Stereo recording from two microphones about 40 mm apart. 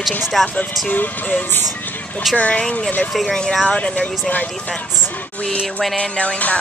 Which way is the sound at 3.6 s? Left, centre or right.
Left.